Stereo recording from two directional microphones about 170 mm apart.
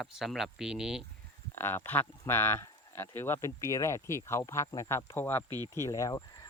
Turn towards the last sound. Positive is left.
turn(degrees=20)  # may be behind; listen again after turning